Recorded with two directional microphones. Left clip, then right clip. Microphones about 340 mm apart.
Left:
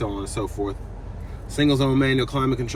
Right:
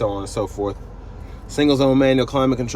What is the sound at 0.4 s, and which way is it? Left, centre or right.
Speech, centre.